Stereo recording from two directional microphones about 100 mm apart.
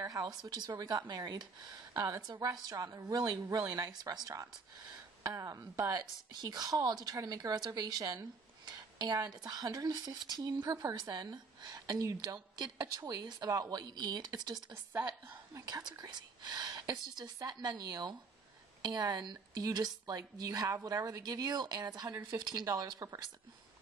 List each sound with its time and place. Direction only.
0.0 s a woman's voice: 40° right (ahead or behind)
14.7 s a woman's voice: 20° right (ahead or behind)
15.5 s a woman's voice: 40° right (ahead or behind)